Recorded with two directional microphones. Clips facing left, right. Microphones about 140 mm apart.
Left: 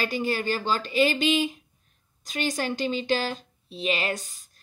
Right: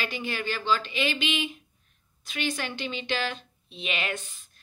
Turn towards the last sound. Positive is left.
turn(degrees=40)  # may be behind; listen again after turning